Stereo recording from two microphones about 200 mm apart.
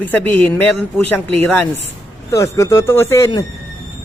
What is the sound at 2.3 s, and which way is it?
A man's voice, 15° left (ahead or behind).